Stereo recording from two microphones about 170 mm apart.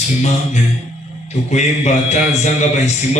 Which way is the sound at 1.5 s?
45° left (ahead or behind).